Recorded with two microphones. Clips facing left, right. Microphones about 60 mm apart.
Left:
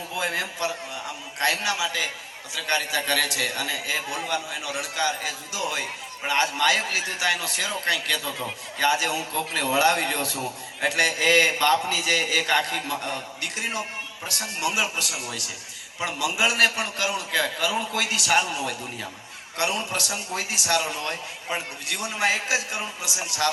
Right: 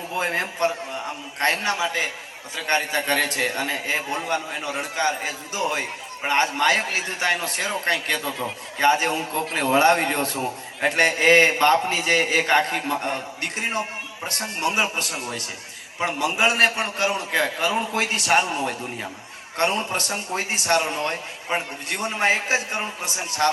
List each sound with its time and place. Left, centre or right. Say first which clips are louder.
0.1 s a man's voice: right 3 dB; right